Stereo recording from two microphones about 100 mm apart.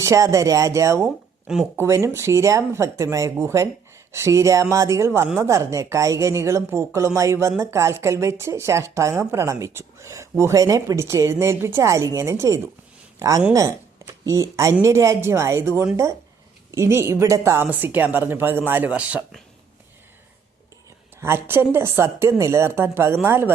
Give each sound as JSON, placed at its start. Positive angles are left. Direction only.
{"t": 0.0, "sound": "speech", "side_deg": -30}
{"t": 21.2, "sound": "speech", "side_deg": -25}